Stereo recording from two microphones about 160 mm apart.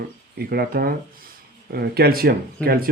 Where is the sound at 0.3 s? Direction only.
75° right (ahead or behind).